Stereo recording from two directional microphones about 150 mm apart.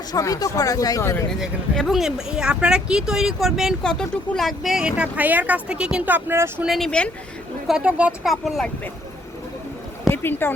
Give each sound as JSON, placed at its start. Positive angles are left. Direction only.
{"t": 0.1, "sound": "speech", "side_deg": 25}
{"t": 1.4, "sound": "speech", "side_deg": 0}
{"t": 6.7, "sound": "speech", "side_deg": 0}
{"t": 7.7, "sound": "speech", "side_deg": -5}
{"t": 10.1, "sound": "a sound", "side_deg": 15}